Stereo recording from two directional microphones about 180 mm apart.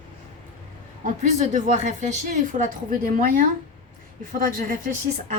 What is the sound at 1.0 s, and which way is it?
A woman's voice, 45° right (ahead or behind).